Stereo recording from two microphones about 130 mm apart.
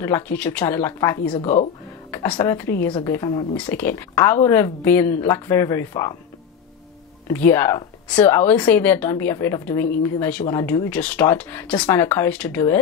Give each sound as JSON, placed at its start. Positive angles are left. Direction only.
{"t": 0.0, "sound": "speech", "side_deg": 15}
{"t": 3.0, "sound": "a woman's voice", "side_deg": 30}
{"t": 3.5, "sound": "a woman's voice", "side_deg": 15}
{"t": 7.2, "sound": "speech", "side_deg": 15}